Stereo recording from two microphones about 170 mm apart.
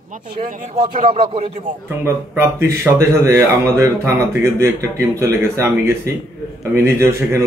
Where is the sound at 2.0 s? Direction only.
15° right (ahead or behind).